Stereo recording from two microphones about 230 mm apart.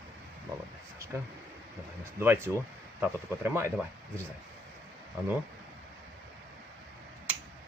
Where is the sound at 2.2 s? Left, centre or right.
Centre.